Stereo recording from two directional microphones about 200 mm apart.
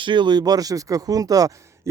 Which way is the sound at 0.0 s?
25° right (ahead or behind).